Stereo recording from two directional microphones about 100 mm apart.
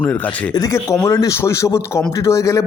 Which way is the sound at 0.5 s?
30° left (ahead or behind).